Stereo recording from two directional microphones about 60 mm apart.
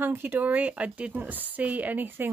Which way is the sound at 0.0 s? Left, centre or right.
Right.